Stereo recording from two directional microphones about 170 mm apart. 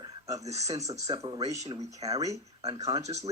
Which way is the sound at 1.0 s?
25° right (ahead or behind).